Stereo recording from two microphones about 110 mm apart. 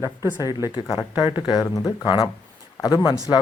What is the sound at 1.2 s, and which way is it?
Speech, 45° left (ahead or behind).